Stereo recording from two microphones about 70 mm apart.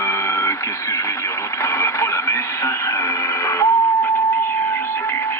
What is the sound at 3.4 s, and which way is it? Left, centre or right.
Music, left.